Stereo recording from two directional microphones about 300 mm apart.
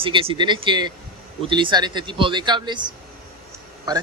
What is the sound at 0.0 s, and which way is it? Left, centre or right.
Speech, centre.